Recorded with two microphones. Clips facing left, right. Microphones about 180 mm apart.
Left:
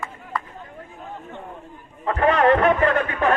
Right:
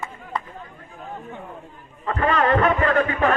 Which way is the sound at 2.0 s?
40° right (ahead or behind).